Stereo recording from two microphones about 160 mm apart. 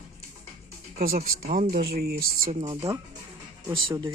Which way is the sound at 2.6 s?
20° right (ahead or behind).